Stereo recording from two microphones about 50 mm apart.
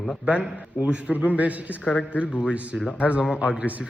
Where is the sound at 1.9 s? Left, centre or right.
Left.